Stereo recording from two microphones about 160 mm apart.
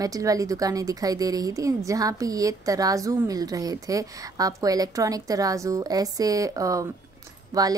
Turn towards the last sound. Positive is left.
turn(degrees=-20)  # may be behind; listen again after turning